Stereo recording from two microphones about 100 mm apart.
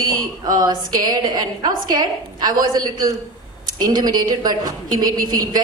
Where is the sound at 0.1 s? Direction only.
40° right (ahead or behind).